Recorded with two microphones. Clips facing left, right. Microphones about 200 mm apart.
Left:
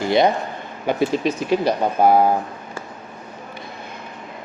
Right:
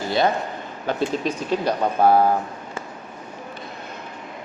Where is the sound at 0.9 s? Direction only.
10° left (ahead or behind).